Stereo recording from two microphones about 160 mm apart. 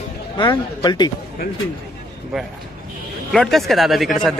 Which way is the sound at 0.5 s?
25° left (ahead or behind).